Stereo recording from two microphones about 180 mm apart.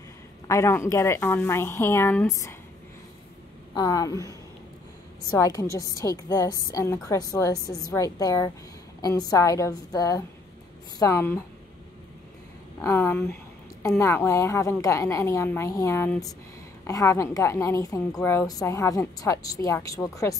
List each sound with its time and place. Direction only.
0.5 s a woman's voice: 15° left (ahead or behind)
3.7 s a woman's voice: 20° left (ahead or behind)
12.8 s a woman's voice: 15° left (ahead or behind)